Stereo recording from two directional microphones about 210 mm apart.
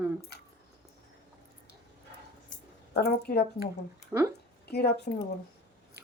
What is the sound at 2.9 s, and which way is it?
Speech, 50° left (ahead or behind).